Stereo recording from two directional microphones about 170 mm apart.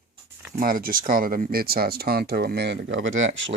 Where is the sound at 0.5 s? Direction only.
55° right (ahead or behind).